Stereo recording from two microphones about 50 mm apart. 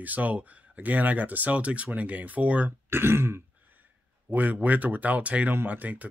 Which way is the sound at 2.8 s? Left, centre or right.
Right.